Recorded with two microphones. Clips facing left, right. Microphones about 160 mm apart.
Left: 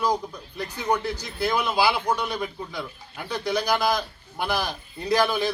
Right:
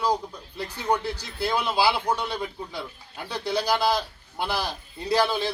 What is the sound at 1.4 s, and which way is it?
A man's voice, 30° right (ahead or behind).